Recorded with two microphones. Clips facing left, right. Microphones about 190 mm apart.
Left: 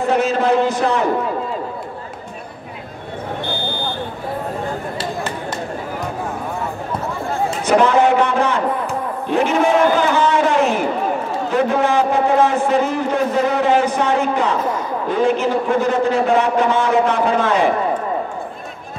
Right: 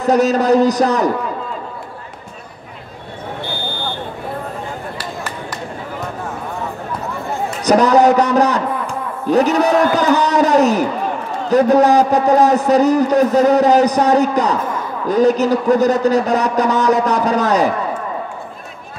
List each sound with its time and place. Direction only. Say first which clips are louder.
0.0 s a man's voice: right 3 dB; 40° right (ahead or behind)
7.6 s a man's voice: right 3 dB; 40° right (ahead or behind)